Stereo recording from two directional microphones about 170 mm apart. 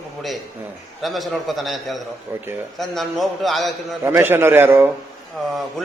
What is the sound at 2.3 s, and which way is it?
Speech, 10° right (ahead or behind).